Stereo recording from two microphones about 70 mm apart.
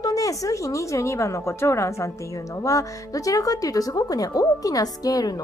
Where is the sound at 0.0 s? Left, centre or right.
Left.